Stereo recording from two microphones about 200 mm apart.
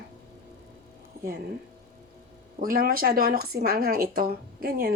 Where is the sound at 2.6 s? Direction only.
45° right (ahead or behind).